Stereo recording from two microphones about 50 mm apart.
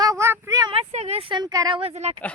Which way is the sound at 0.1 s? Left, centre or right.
Right.